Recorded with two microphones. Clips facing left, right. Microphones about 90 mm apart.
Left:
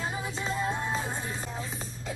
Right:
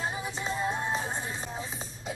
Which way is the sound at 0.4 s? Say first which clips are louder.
Even; 20° right (ahead or behind).